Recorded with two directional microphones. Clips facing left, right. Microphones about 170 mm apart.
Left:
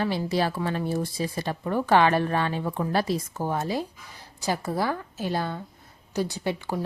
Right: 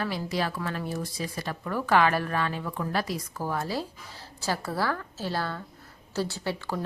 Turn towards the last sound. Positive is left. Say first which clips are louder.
# left 3 dB
turn(degrees=15)  # may be behind; listen again after turning